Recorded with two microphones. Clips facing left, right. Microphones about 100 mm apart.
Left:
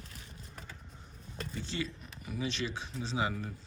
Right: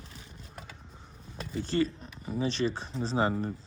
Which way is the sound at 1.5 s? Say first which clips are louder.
Right 11 dB; 45° right (ahead or behind).